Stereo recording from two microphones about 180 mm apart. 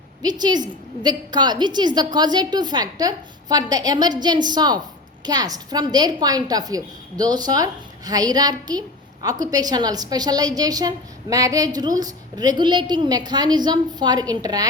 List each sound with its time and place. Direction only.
0.2 s a woman's voice: 25° right (ahead or behind)